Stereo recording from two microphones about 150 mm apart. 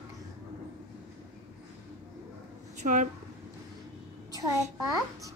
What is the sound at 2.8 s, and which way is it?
Speech, 55° right (ahead or behind).